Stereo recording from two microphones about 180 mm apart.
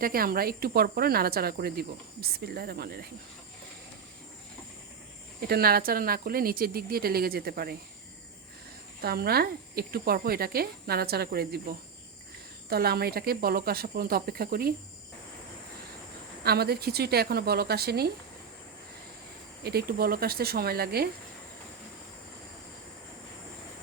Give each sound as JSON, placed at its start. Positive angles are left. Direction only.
{"t": 0.0, "sound": "speech", "side_deg": -55}
{"t": 5.4, "sound": "speech", "side_deg": -60}
{"t": 9.0, "sound": "speech", "side_deg": -60}
{"t": 12.6, "sound": "speech", "side_deg": -60}
{"t": 16.4, "sound": "speech", "side_deg": -60}
{"t": 19.6, "sound": "speech", "side_deg": -60}